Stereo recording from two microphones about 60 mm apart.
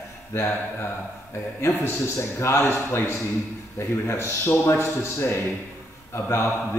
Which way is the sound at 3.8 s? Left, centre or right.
Left.